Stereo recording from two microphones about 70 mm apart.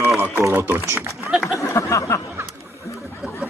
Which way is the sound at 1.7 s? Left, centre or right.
Left.